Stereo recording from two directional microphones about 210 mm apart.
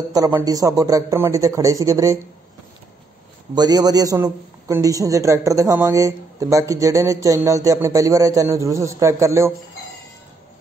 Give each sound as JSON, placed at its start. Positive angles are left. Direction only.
{"t": 0.1, "sound": "a man's voice", "side_deg": -15}
{"t": 3.5, "sound": "a man's voice", "side_deg": -20}